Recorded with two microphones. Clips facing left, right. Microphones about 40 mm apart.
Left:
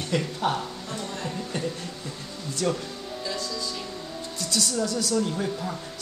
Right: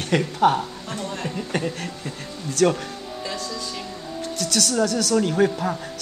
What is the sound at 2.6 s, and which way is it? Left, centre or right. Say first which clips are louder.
Speech: right 8 dB; right.